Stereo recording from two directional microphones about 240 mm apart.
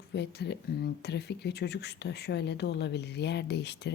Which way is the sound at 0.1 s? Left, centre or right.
Left.